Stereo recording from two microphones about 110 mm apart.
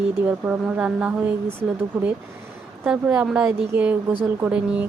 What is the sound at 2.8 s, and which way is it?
Speech, 10° right (ahead or behind).